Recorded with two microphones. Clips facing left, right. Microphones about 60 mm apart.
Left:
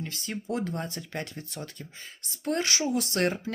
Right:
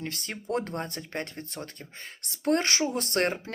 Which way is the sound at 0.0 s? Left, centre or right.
Right.